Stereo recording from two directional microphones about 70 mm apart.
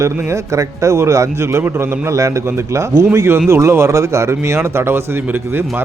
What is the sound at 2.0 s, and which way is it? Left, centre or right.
A man's voice, right.